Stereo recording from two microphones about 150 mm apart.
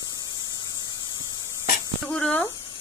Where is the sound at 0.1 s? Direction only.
25° left (ahead or behind).